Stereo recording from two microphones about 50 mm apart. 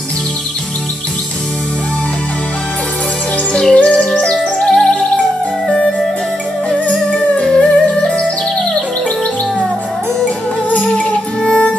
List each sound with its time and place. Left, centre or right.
3.7 s music: left
6.7 s music: left
10.7 s music: left